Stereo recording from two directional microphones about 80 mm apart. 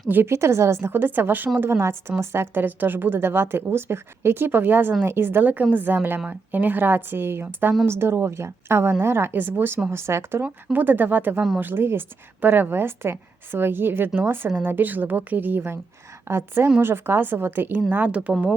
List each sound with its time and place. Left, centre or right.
0.1 s a woman's voice: right
10.4 s a woman's voice: right